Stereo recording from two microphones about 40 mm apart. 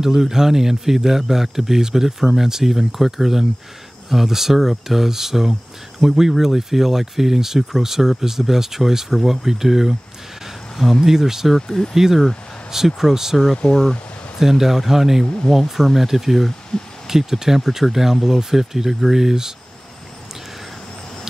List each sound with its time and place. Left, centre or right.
0.0 s speech: centre
10.4 s a sound: centre
11.1 s speech: centre
11.5 s speech: centre
11.9 s speech: centre
13.6 s speech: left
14.4 s speech: centre